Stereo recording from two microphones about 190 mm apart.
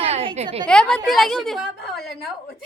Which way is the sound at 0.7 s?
5° left (ahead or behind).